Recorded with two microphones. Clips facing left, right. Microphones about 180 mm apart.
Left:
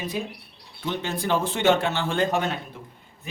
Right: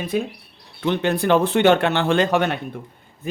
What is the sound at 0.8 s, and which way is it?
Speech, 65° right (ahead or behind).